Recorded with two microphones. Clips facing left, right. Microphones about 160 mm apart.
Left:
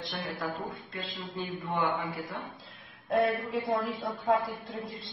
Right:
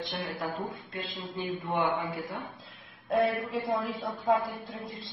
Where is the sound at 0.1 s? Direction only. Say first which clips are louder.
Right 1 dB; 30° right (ahead or behind).